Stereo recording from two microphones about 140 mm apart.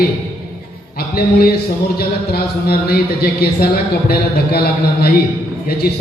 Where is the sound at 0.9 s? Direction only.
90° left.